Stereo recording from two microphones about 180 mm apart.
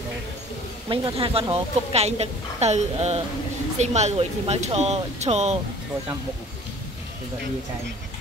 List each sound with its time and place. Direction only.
0.8 s a woman's voice: 30° right (ahead or behind)